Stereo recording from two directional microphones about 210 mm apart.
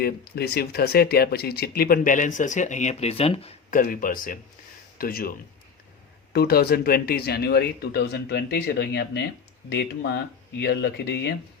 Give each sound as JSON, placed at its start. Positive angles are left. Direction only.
{"t": 0.0, "sound": "speech", "side_deg": 50}
{"t": 3.7, "sound": "speech", "side_deg": 40}
{"t": 6.3, "sound": "speech", "side_deg": 45}